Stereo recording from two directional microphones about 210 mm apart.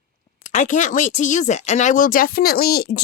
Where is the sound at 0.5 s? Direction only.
35° left (ahead or behind).